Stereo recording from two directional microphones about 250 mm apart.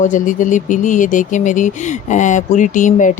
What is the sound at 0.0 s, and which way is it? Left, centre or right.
Speech, left.